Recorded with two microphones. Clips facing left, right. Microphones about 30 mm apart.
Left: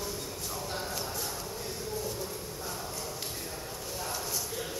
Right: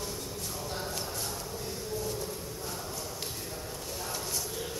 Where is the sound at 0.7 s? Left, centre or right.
Centre.